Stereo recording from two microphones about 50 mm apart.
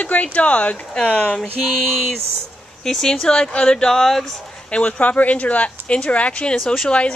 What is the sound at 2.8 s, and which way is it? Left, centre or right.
Speech, centre.